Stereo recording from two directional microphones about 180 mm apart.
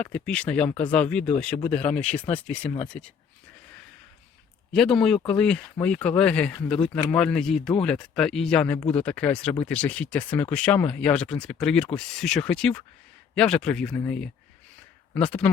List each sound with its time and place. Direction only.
0.0 s speech: 5° left (ahead or behind)
1.5 s speech: 25° left (ahead or behind)
2.0 s speech: 5° left (ahead or behind)
4.7 s speech: 5° left (ahead or behind)